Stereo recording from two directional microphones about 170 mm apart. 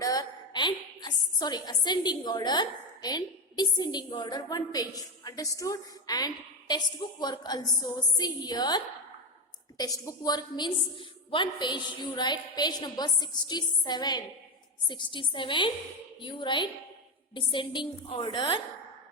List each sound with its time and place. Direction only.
0.0 s a woman's voice: 20° left (ahead or behind)